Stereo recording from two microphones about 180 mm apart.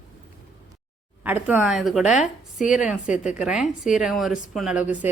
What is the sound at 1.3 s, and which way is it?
A woman's voice, 10° right (ahead or behind).